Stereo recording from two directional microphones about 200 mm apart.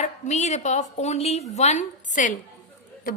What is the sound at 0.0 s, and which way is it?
A woman's voice, 35° left (ahead or behind).